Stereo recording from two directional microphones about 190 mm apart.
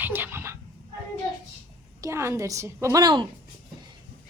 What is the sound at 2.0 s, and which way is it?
A woman's voice, 15° right (ahead or behind).